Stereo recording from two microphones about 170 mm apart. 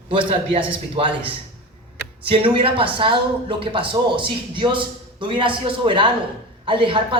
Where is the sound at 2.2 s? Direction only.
30° right (ahead or behind).